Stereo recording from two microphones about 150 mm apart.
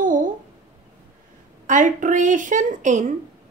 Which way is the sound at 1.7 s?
55° right (ahead or behind).